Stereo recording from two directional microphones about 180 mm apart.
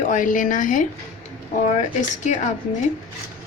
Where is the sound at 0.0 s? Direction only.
45° left (ahead or behind).